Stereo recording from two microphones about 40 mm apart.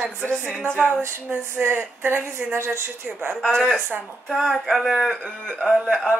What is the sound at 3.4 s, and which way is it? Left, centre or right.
Speech, centre.